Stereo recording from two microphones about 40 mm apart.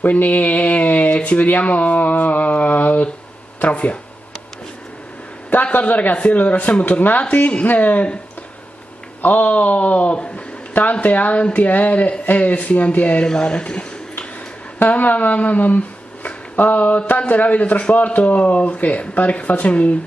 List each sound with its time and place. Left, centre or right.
0.0 s speech: left
5.5 s a man's voice: left
9.2 s speech: left
10.8 s speech: left
13.3 s speech: left
14.9 s speech: left